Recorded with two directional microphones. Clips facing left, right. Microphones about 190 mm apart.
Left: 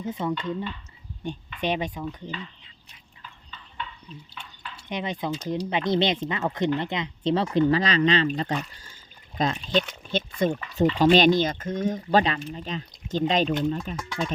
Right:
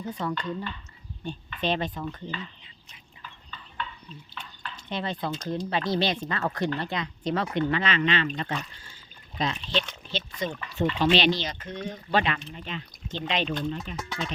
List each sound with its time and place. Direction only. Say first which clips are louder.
0.0 s speech: left 3 dB; 20° left (ahead or behind)
4.4 s dishes: right 3 dB; 10° left (ahead or behind)
4.9 s speech: left 2 dB; 15° left (ahead or behind); by 8.3 s 35° left (ahead or behind)
9.4 s speech: left 4 dB; 45° left (ahead or behind)